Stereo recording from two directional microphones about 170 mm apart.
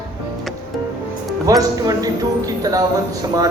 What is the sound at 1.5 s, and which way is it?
A man's voice, 20° right (ahead or behind).